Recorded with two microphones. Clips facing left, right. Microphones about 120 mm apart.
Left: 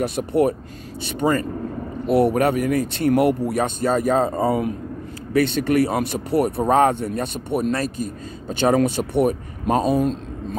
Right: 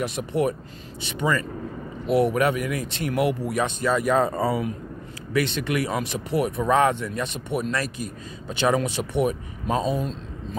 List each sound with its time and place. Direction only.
0.0 s speech: 45° left (ahead or behind); by 4.5 s 30° left (ahead or behind)
4.5 s speech: 50° left (ahead or behind)